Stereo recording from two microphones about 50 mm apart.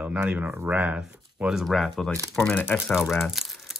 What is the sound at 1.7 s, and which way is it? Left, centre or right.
Speech, centre.